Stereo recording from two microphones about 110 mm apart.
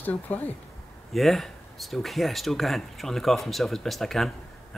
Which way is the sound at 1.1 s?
Centre (ahead or behind).